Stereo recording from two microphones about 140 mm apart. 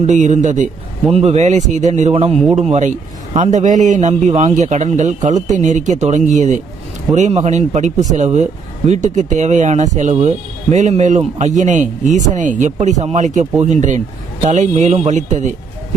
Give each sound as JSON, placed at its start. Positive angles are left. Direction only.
{"t": 0.0, "sound": "speech", "side_deg": -60}